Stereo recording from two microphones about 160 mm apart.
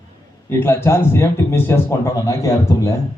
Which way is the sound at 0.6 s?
15° left (ahead or behind).